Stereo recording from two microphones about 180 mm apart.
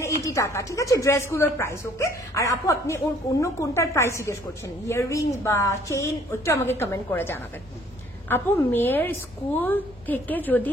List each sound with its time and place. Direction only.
0.0 s a woman's voice: 15° left (ahead or behind)